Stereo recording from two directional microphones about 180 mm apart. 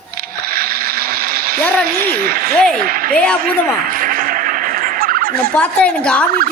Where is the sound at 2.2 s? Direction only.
55° right (ahead or behind).